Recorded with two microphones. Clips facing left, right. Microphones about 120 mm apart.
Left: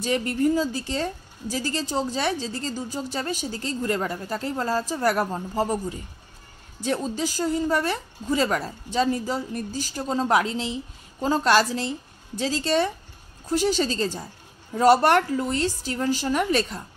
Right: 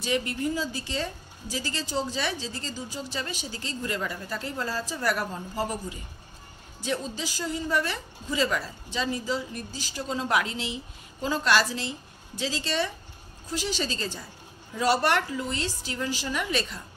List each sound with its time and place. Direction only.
0.0 s a woman's voice: 45° left (ahead or behind)